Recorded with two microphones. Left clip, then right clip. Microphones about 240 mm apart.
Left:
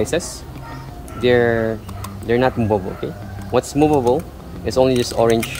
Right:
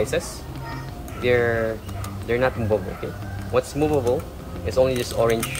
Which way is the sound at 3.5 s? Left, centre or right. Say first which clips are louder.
Left 5 dB; left.